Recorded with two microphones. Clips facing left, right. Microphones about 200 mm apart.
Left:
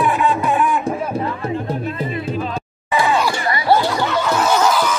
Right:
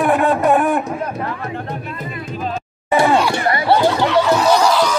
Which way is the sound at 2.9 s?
55° right (ahead or behind).